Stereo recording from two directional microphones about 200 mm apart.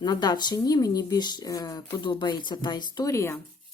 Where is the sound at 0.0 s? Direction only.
20° left (ahead or behind).